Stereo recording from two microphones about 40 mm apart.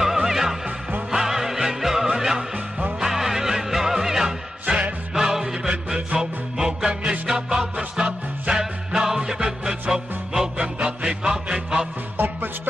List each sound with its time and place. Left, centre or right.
0.0 s music: centre
4.6 s music: right
5.1 s music: centre
10.6 s music: right